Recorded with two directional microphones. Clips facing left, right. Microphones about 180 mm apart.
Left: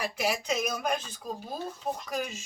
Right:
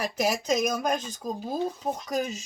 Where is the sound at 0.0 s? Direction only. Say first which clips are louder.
Right 3 dB; 40° right (ahead or behind).